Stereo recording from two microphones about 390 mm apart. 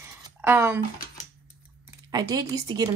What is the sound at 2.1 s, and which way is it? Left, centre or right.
Speech, centre.